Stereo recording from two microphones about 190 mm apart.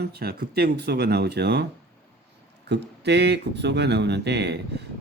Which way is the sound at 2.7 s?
60° right (ahead or behind).